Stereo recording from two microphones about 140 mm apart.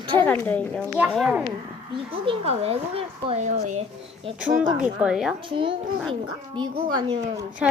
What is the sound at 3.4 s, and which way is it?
Speech, 60° right (ahead or behind).